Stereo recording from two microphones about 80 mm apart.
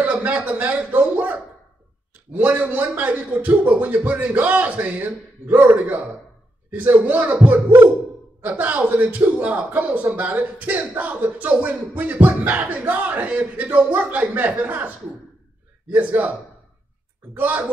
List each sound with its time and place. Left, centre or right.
0.0 s a man's voice: centre
15.9 s a man's voice: centre
17.4 s a man's voice: centre